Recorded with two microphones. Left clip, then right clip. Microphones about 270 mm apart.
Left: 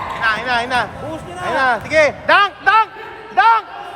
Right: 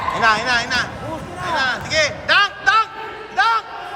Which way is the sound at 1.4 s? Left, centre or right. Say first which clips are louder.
Left 4 dB; left.